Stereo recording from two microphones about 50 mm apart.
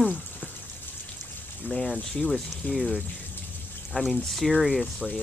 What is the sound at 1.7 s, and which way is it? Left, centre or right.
Speech, centre.